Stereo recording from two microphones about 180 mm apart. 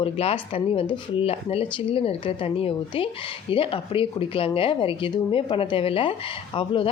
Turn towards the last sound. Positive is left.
turn(degrees=30)  # may be behind; listen again after turning